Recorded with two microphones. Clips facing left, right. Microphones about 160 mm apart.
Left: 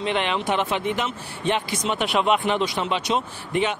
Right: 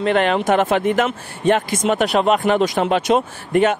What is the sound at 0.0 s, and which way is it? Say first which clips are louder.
Speech: right 7 dB; 45° right (ahead or behind).